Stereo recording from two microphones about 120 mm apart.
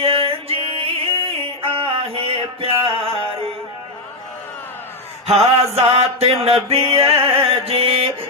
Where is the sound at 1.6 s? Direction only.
50° right (ahead or behind).